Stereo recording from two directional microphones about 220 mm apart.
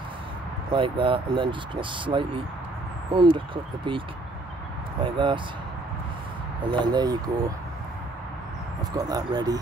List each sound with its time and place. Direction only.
0.7 s speech: 25° right (ahead or behind)
5.0 s speech: 20° right (ahead or behind)
6.7 s speech: 20° right (ahead or behind)
8.9 s speech: 15° right (ahead or behind)